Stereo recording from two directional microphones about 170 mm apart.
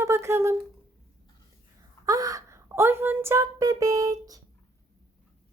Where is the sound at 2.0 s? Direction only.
20° right (ahead or behind).